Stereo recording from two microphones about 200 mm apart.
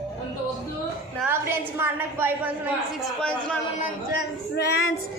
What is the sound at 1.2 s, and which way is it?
A woman's voice, 10° right (ahead or behind).